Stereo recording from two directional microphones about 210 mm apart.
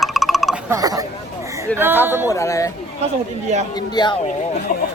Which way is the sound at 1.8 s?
10° right (ahead or behind).